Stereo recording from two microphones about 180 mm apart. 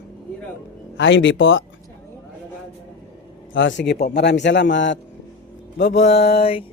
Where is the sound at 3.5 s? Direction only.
90° left.